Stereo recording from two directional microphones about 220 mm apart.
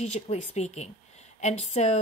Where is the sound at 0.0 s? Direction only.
30° left (ahead or behind).